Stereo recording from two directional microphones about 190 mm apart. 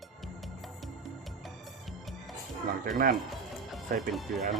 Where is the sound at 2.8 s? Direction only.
45° right (ahead or behind).